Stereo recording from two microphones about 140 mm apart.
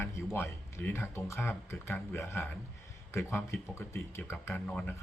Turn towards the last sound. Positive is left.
turn(degrees=10)  # may be behind; listen again after turning